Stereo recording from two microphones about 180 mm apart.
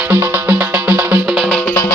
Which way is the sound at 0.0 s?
10° right (ahead or behind).